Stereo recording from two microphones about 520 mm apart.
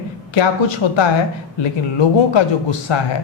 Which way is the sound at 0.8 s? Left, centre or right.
Left.